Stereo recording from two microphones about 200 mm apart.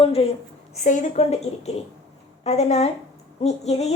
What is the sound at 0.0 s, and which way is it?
A woman's voice, 30° left (ahead or behind).